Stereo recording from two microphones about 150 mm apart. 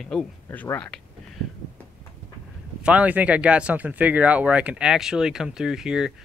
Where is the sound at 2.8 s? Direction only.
10° right (ahead or behind).